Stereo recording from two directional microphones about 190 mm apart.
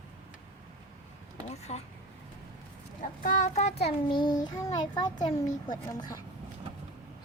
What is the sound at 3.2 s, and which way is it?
Child singing, 40° left (ahead or behind).